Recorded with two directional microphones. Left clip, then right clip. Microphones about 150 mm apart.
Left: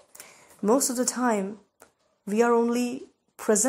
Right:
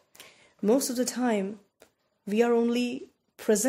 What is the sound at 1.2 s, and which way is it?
Speech, 15° right (ahead or behind).